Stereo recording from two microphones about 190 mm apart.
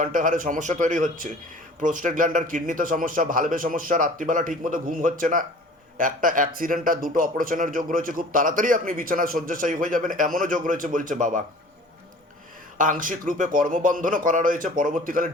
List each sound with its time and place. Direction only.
0.0 s speech: 45° right (ahead or behind)
12.7 s speech: 45° right (ahead or behind)